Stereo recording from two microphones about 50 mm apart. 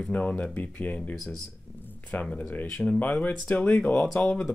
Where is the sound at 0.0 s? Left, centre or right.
Left.